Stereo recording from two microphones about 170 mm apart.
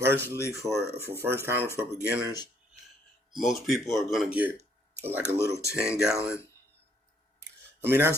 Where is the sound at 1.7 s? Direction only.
15° left (ahead or behind).